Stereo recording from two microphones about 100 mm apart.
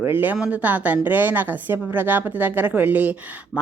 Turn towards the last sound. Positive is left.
turn(degrees=-15)  # may be behind; listen again after turning